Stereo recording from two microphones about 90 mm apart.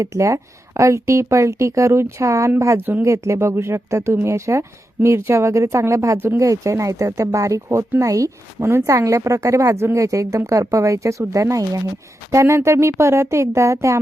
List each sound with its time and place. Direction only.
0.0 s speech: 35° right (ahead or behind)